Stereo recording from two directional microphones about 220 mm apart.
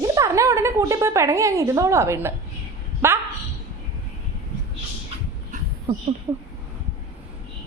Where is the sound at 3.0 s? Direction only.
10° right (ahead or behind).